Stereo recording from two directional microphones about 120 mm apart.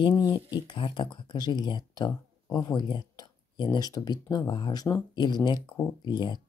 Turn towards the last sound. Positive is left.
turn(degrees=40)  # may be behind; listen again after turning